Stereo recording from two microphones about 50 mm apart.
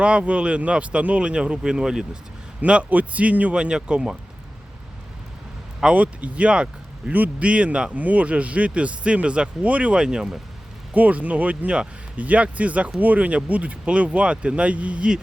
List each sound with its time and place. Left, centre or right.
0.0 s speech: right
2.6 s speech: right
3.5 s speech: centre
5.8 s speech: right
10.9 s speech: right